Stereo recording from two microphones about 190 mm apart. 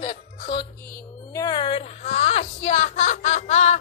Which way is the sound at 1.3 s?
20° left (ahead or behind).